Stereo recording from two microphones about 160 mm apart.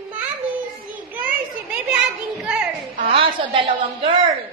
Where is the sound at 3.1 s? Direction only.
35° right (ahead or behind).